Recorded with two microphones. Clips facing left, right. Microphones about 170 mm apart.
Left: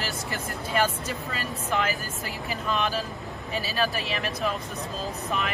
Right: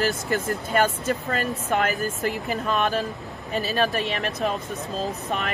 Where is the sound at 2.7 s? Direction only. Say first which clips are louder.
Right 3 dB; 45° right (ahead or behind).